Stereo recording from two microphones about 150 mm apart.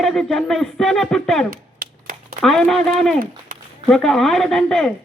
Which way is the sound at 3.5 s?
65° right (ahead or behind).